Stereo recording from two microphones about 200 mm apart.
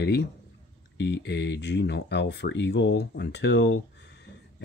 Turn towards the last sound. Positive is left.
turn(degrees=60)  # may be behind; listen again after turning